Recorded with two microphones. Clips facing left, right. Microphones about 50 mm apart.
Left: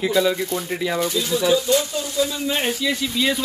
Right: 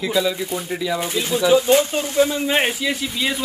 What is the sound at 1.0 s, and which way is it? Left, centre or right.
Speech, right.